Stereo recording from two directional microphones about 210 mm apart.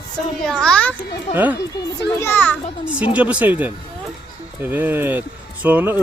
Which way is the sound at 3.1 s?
5° right (ahead or behind).